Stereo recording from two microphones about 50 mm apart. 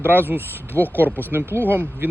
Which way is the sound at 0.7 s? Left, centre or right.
Left.